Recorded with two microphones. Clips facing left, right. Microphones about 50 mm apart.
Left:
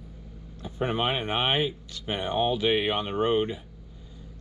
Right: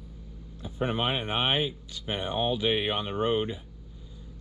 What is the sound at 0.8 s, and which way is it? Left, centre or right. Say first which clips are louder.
Speech: left 2 dB; centre.